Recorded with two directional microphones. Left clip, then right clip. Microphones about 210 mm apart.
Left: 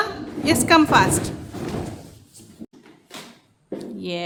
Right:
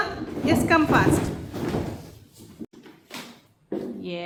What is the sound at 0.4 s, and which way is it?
Speech, 40° left (ahead or behind).